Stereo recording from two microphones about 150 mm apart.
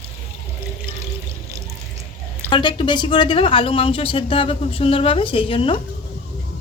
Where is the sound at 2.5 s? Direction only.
30° left (ahead or behind).